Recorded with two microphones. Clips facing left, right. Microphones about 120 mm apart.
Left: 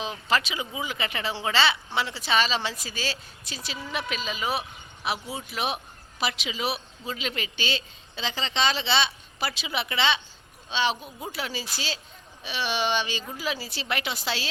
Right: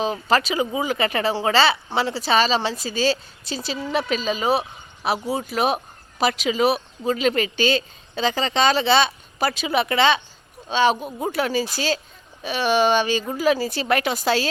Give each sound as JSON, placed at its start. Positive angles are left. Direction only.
{"t": 0.0, "sound": "speech", "side_deg": -40}